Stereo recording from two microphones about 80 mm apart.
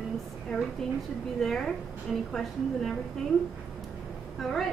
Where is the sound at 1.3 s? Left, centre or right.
Centre.